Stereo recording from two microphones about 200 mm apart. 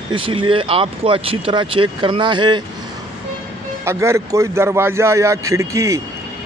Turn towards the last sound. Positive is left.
turn(degrees=-15)  # may be behind; listen again after turning